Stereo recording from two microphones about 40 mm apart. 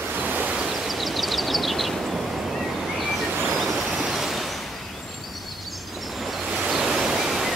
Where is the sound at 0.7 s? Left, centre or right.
Centre.